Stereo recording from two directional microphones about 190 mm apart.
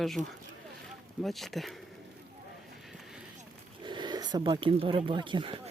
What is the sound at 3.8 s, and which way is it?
Speech, 25° right (ahead or behind).